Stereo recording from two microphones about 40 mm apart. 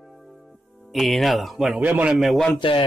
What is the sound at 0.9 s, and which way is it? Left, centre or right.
Speech, centre.